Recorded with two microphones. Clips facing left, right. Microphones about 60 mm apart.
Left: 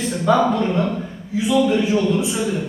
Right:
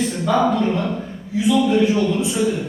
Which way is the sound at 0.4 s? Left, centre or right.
Centre.